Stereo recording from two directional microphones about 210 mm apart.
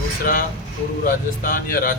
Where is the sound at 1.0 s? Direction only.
45° left (ahead or behind).